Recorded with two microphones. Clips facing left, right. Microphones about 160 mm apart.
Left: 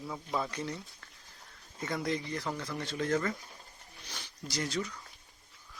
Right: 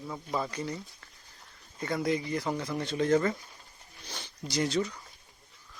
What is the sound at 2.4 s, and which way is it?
Speech, 20° right (ahead or behind).